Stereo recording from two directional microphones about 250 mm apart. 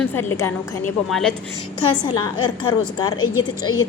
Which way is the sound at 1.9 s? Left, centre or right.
Centre.